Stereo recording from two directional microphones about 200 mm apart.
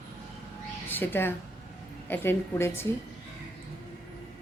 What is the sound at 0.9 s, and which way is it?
A woman's voice, 10° left (ahead or behind).